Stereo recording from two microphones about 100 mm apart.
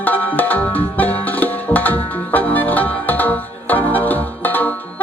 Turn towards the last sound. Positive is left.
turn(degrees=15)  # may be behind; listen again after turning